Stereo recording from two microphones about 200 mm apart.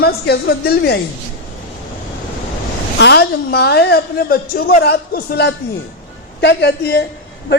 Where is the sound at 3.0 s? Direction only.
55° left (ahead or behind).